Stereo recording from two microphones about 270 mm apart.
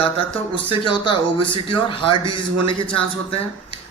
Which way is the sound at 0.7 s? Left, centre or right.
Centre.